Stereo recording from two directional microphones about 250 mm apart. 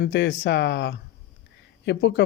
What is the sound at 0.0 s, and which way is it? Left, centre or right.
Speech, left.